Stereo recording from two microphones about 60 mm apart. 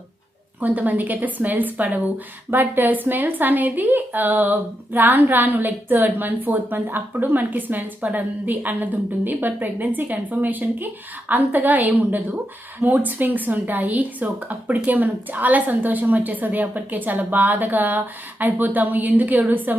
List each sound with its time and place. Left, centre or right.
0.6 s a woman's voice: right